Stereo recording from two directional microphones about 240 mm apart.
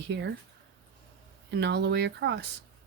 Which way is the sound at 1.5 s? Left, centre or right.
Right.